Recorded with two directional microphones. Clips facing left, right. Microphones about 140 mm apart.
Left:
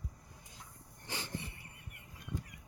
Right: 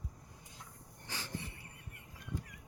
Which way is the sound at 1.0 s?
20° left (ahead or behind).